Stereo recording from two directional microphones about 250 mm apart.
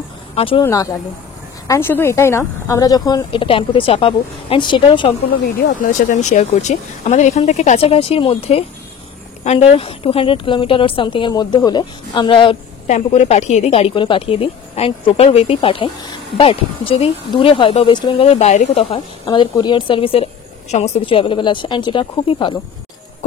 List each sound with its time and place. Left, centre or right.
0.4 s speech: centre
5.8 s speech: left